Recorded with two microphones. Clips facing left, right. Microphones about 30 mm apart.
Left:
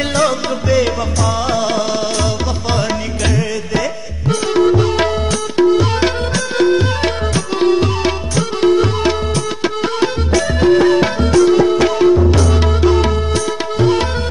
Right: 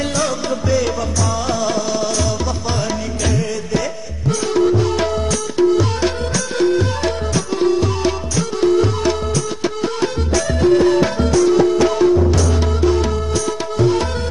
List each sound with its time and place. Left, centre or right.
0.1 s music: left
3.3 s music: left